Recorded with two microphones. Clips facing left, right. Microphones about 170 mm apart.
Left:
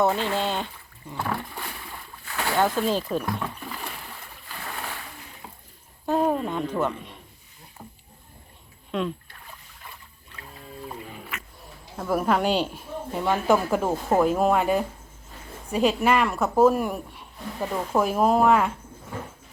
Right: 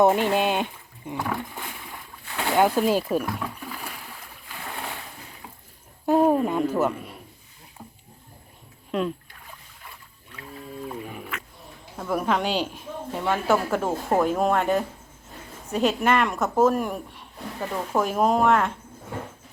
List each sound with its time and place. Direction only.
0.0 s a sound: 20° right (ahead or behind)
2.4 s speech: 15° right (ahead or behind)
6.1 s speech: 10° right (ahead or behind)
8.9 s speech: 5° right (ahead or behind)
11.9 s speech: 5° left (ahead or behind)